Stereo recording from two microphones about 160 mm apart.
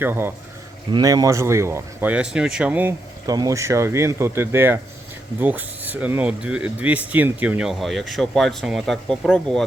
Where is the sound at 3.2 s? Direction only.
20° right (ahead or behind).